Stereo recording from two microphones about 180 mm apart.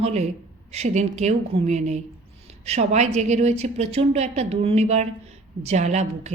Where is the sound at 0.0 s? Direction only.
40° right (ahead or behind).